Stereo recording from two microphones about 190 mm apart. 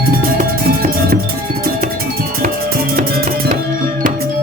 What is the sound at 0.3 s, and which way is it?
Music, 50° right (ahead or behind).